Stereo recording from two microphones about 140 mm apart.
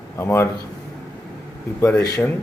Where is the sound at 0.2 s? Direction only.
15° left (ahead or behind).